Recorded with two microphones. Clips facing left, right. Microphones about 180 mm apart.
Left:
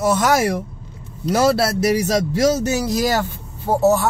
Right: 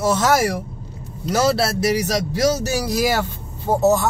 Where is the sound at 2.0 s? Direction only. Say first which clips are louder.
Left 2 dB; 20° left (ahead or behind).